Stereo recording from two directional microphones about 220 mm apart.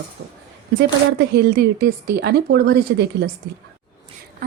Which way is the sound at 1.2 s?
45° right (ahead or behind).